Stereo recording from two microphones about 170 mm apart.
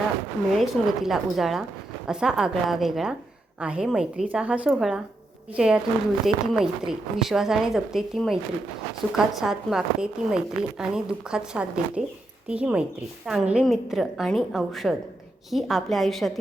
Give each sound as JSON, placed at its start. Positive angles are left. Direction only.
{"t": 0.6, "sound": "a woman's voice", "side_deg": 0}